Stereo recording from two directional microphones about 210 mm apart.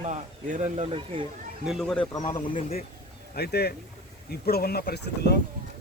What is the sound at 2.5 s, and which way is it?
Speech, 30° left (ahead or behind).